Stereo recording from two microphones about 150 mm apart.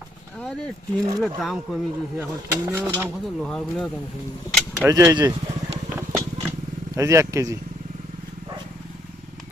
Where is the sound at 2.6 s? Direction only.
15° right (ahead or behind).